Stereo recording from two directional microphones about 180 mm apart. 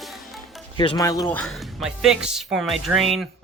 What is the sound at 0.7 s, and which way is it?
Speech, 25° left (ahead or behind).